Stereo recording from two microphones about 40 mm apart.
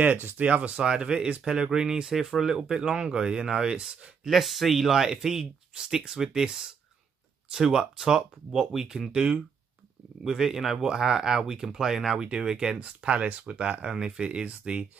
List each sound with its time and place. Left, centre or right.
0.0 s speech: right
0.8 s speech: right
4.2 s speech: centre; by 9.4 s right
10.2 s speech: centre